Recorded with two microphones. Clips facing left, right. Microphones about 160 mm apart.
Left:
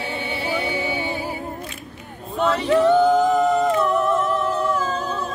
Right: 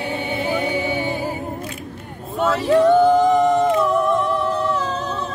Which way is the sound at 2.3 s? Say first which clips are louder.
Right 2 dB; 5° right (ahead or behind).